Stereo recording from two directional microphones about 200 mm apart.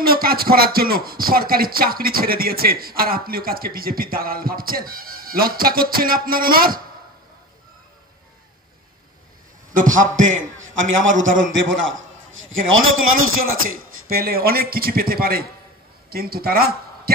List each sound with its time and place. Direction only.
0.0 s speech: 50° right (ahead or behind)
9.8 s a man's voice: 40° right (ahead or behind)
10.3 s a man's voice: 75° right (ahead or behind); by 13.4 s 90° right
14.0 s speech: 50° right (ahead or behind)